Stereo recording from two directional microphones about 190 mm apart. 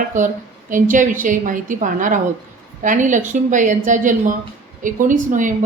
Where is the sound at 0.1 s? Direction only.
40° right (ahead or behind).